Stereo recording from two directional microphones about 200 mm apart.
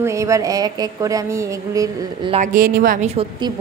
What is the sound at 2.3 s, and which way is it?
Speech, 40° right (ahead or behind).